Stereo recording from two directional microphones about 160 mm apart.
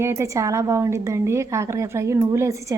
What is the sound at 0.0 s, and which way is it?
A woman's voice, 15° right (ahead or behind).